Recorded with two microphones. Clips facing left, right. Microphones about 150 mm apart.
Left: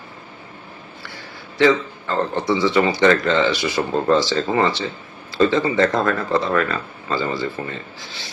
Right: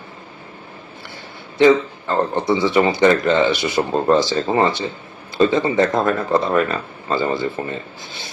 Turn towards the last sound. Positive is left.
turn(degrees=-20)  # may be behind; listen again after turning